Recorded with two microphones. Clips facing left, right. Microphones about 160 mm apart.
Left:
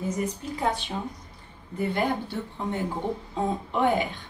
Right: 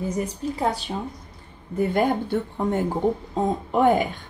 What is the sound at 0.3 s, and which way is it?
Speech, 35° right (ahead or behind).